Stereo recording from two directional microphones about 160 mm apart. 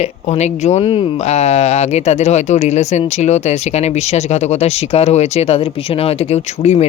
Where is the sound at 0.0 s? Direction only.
45° left (ahead or behind).